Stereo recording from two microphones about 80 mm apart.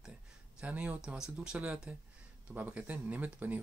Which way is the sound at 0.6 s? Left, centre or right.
Centre.